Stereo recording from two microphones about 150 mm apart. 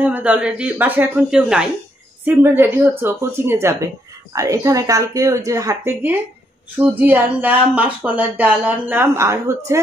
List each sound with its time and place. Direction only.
0.0 s a woman's voice: 10° right (ahead or behind)